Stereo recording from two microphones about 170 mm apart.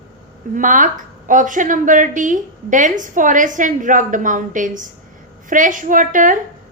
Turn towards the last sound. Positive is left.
turn(degrees=-50)  # may be behind; listen again after turning